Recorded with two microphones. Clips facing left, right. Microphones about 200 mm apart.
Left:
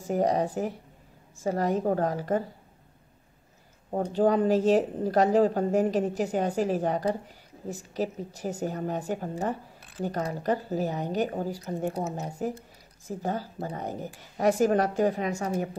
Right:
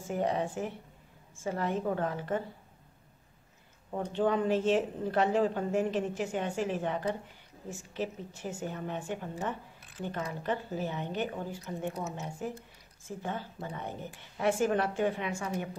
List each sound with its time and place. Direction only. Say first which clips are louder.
0.0 s speech: left 6 dB; 40° left (ahead or behind)
3.9 s speech: left 6 dB; 40° left (ahead or behind)